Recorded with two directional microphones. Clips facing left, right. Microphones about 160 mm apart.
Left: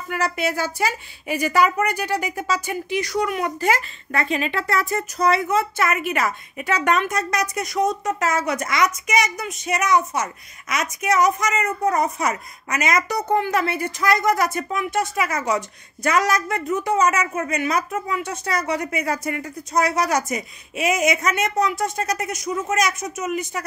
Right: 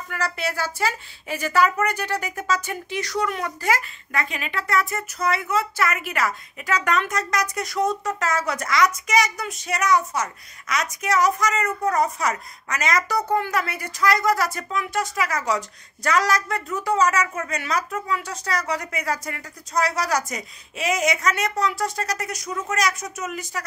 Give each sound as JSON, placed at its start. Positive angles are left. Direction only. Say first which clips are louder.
{"t": 0.1, "sound": "a woman's voice", "louder": "left 4 dB", "side_deg": 20}
{"t": 3.6, "sound": "a woman's voice", "louder": "left 3 dB", "side_deg": 30}